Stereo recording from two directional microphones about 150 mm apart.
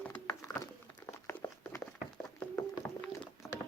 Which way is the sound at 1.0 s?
15° left (ahead or behind).